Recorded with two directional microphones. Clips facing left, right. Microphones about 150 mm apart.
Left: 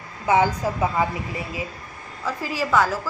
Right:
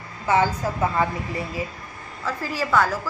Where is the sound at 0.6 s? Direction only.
15° left (ahead or behind).